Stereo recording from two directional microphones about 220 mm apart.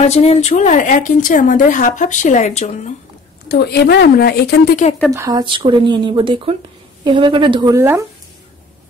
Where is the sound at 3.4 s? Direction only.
45° left (ahead or behind).